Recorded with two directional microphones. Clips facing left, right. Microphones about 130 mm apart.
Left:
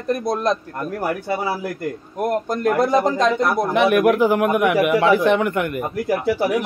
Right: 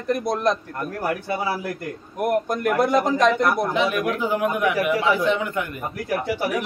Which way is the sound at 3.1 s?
Centre (ahead or behind).